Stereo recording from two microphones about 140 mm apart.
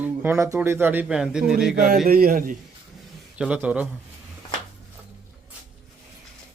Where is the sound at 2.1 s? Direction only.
90° right.